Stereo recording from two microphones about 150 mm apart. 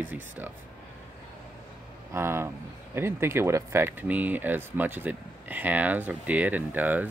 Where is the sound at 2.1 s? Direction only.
15° right (ahead or behind).